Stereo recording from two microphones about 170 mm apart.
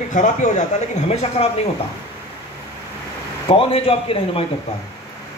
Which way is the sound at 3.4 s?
35° left (ahead or behind).